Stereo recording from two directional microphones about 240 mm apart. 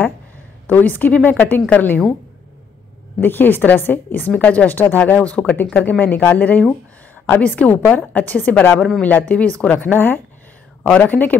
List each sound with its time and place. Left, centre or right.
0.7 s a woman's voice: centre
3.2 s a woman's voice: centre